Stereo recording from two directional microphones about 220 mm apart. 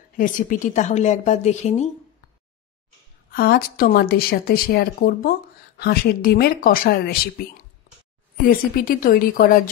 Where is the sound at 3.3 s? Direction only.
45° left (ahead or behind).